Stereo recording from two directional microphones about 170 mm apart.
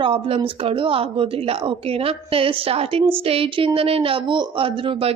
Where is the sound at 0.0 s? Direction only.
35° right (ahead or behind).